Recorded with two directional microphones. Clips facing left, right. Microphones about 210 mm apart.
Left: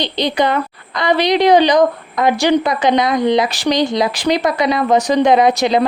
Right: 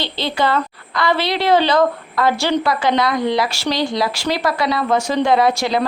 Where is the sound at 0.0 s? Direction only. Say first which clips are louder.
Left 4 dB; 20° left (ahead or behind).